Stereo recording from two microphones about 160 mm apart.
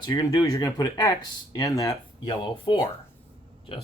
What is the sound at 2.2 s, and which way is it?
Speech, 35° left (ahead or behind).